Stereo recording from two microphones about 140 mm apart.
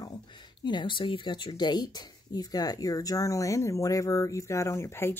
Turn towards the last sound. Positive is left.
turn(degrees=20)  # may be behind; listen again after turning